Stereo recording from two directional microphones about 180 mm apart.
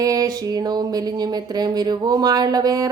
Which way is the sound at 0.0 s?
20° right (ahead or behind).